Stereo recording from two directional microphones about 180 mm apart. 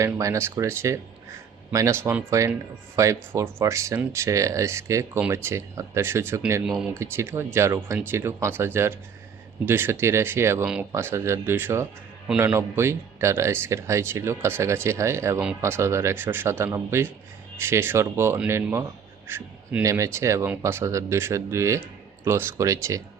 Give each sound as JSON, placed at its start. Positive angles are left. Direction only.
{"t": 0.0, "sound": "speech", "side_deg": -15}
{"t": 7.0, "sound": "speech", "side_deg": -15}